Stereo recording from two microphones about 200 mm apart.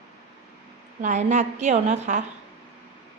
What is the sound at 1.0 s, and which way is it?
A woman's voice, 35° right (ahead or behind).